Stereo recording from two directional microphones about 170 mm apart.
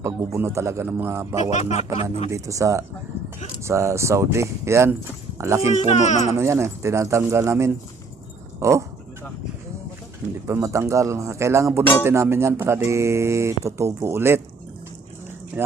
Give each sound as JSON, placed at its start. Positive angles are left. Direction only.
{"t": 0.0, "sound": "speech", "side_deg": -15}
{"t": 1.5, "sound": "music", "side_deg": 40}
{"t": 2.3, "sound": "speech", "side_deg": -20}
{"t": 5.7, "sound": "speech", "side_deg": 40}
{"t": 6.2, "sound": "speech", "side_deg": -15}
{"t": 10.4, "sound": "speech", "side_deg": -15}
{"t": 15.6, "sound": "speech", "side_deg": -10}